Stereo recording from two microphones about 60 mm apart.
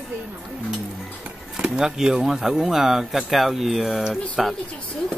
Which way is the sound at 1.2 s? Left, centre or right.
Centre.